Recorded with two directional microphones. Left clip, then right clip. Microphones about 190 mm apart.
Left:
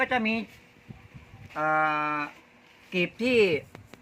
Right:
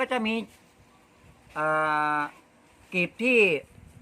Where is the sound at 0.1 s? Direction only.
Centre (ahead or behind).